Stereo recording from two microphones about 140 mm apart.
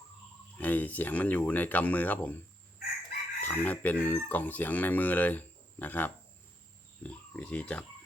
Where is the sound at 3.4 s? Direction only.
10° left (ahead or behind).